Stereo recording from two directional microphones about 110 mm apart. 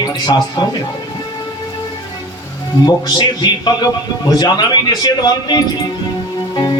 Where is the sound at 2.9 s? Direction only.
40° left (ahead or behind).